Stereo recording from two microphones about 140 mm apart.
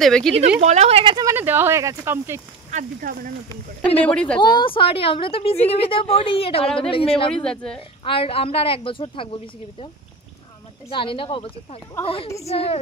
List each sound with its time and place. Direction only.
0.0 s speech: 5° left (ahead or behind)
0.6 s speech: 55° right (ahead or behind)
1.1 s speech: 20° right (ahead or behind)
2.7 s speech: 70° right (ahead or behind)
3.8 s speech: 10° left (ahead or behind)
4.4 s a woman's voice: 35° left (ahead or behind)
6.6 s speech: 5° left (ahead or behind)
6.9 s a woman's voice: 40° left (ahead or behind)
7.4 s speech: 5° left (ahead or behind)
8.0 s a woman's voice: 40° left (ahead or behind)
10.9 s a woman's voice: 40° left (ahead or behind)